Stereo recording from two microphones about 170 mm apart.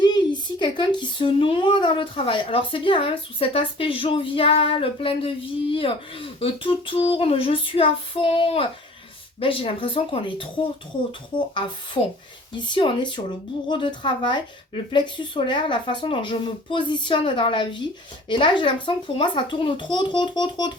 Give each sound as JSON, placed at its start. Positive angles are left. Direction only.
{"t": 0.0, "sound": "speech", "side_deg": 25}
{"t": 12.5, "sound": "speech", "side_deg": 25}